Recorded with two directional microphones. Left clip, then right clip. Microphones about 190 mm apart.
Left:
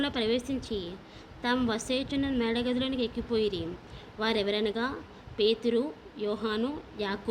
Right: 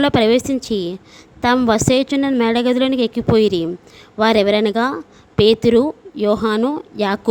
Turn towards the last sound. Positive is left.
turn(degrees=-65)  # may be behind; listen again after turning